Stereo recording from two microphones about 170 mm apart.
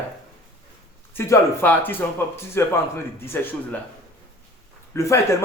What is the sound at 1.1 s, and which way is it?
Speech, 10° left (ahead or behind).